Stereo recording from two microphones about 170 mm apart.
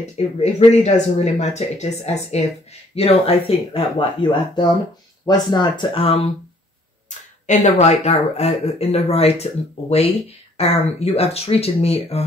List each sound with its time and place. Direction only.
0.4 s speech: 40° left (ahead or behind)
7.1 s speech: 45° left (ahead or behind)